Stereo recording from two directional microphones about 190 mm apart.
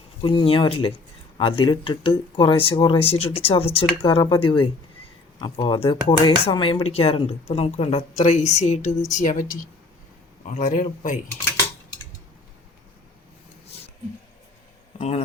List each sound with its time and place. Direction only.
0.2 s a woman's voice: 25° left (ahead or behind); by 11.2 s 45° left (ahead or behind)
14.9 s speech: 35° left (ahead or behind)